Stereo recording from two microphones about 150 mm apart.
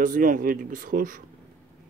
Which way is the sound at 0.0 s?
65° right (ahead or behind).